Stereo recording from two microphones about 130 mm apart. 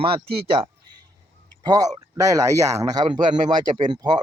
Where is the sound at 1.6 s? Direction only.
30° right (ahead or behind).